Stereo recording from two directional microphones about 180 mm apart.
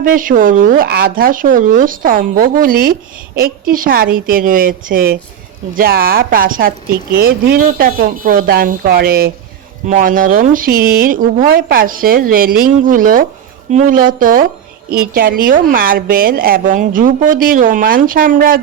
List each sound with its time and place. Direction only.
0.0 s a woman's voice: 50° right (ahead or behind)